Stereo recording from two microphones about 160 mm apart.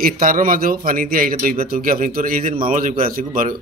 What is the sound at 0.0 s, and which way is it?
A man's voice, 60° right (ahead or behind).